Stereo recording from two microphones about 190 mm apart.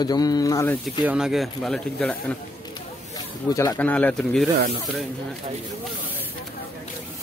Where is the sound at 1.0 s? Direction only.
5° right (ahead or behind).